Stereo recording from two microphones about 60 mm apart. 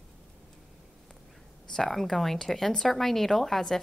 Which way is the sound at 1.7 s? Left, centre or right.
Centre.